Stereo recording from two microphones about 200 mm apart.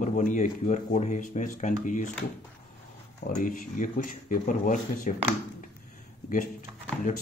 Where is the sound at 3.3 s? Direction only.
40° left (ahead or behind).